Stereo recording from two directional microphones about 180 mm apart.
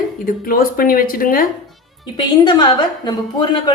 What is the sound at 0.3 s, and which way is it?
Speech, 55° left (ahead or behind).